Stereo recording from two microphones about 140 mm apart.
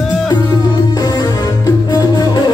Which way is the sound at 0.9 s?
25° left (ahead or behind).